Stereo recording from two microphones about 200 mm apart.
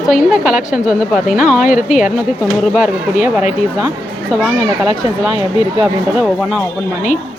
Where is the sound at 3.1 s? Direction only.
35° left (ahead or behind).